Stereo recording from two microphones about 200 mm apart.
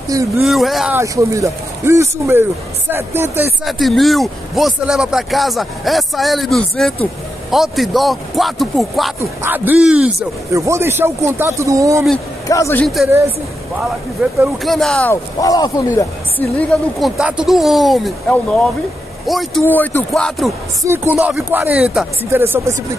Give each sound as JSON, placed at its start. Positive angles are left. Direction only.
{"t": 0.4, "sound": "speech", "side_deg": 0}
{"t": 0.9, "sound": "speech", "side_deg": -15}
{"t": 3.6, "sound": "speech", "side_deg": 0}
{"t": 9.2, "sound": "speech", "side_deg": -10}
{"t": 12.4, "sound": "speech", "side_deg": 15}
{"t": 12.8, "sound": "speech", "side_deg": 0}
{"t": 14.4, "sound": "speech", "side_deg": 0}
{"t": 15.4, "sound": "speech", "side_deg": 20}
{"t": 17.2, "sound": "speech", "side_deg": -5}
{"t": 19.6, "sound": "speech", "side_deg": 10}
{"t": 20.8, "sound": "speech", "side_deg": -10}